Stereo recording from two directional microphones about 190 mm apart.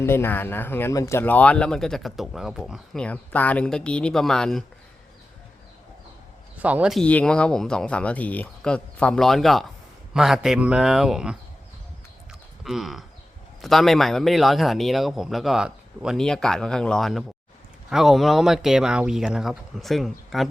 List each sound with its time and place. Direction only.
0.0 s speech: 10° left (ahead or behind)
6.6 s speech: 10° right (ahead or behind)
12.3 s livestock: centre (ahead or behind)
13.6 s speech: centre (ahead or behind)